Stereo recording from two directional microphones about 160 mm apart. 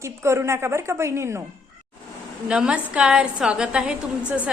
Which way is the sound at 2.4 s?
5° right (ahead or behind).